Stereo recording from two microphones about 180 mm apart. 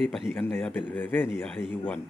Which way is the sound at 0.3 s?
5° left (ahead or behind).